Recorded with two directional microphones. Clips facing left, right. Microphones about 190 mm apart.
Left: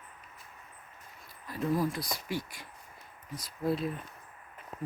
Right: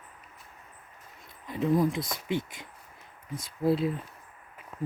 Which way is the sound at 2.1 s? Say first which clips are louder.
Right 5 dB; 20° right (ahead or behind).